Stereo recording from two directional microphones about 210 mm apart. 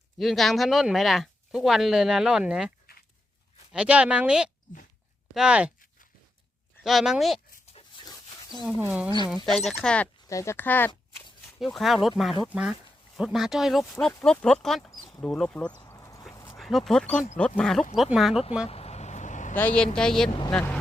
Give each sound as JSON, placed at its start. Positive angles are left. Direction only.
{"t": 0.2, "sound": "speech", "side_deg": 0}
{"t": 6.8, "sound": "speech", "side_deg": 0}
{"t": 7.7, "sound": "a sound", "side_deg": 25}
{"t": 8.6, "sound": "speech", "side_deg": -5}
{"t": 9.6, "sound": "speech", "side_deg": 5}
{"t": 14.8, "sound": "a sound", "side_deg": 20}
{"t": 15.2, "sound": "speech", "side_deg": 5}
{"t": 15.8, "sound": "a sound", "side_deg": 15}
{"t": 16.3, "sound": "dog", "side_deg": 15}
{"t": 16.6, "sound": "speech", "side_deg": 0}
{"t": 18.7, "sound": "vehicle", "side_deg": 30}
{"t": 19.5, "sound": "speech", "side_deg": 5}